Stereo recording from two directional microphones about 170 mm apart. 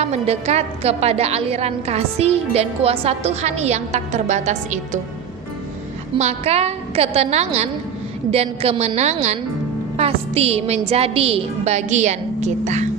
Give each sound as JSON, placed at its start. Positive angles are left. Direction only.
{"t": 0.0, "sound": "a woman's voice", "side_deg": -40}
{"t": 6.1, "sound": "a woman's voice", "side_deg": -40}